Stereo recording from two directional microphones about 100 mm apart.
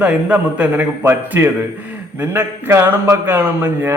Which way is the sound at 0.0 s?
15° right (ahead or behind).